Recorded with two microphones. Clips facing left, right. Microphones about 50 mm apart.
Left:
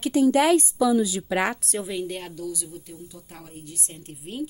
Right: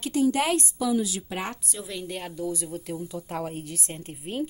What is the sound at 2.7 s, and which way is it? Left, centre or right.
Speech, right.